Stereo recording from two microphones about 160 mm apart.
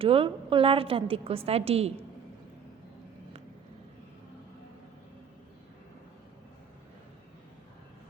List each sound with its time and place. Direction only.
0.0 s a woman's voice: 35° right (ahead or behind)